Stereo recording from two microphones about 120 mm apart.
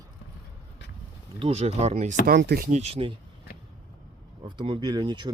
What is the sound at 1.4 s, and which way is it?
Speech, 55° right (ahead or behind).